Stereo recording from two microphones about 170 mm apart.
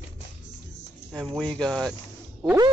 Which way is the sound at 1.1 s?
5° right (ahead or behind).